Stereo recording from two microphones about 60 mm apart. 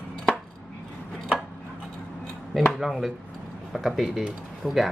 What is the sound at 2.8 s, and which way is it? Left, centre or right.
Speech, centre.